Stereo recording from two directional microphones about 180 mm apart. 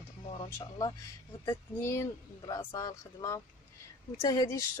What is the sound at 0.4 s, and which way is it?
Speech, 20° left (ahead or behind).